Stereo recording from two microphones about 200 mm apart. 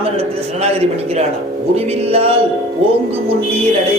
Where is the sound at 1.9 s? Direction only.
30° right (ahead or behind).